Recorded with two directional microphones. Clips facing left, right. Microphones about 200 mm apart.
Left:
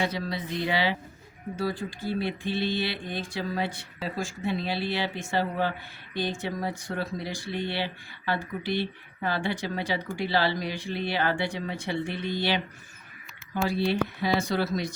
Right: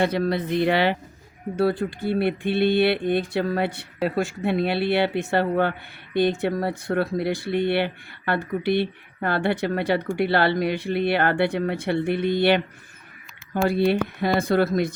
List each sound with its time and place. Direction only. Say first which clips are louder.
0.0 s speech: right 8 dB; 60° right (ahead or behind)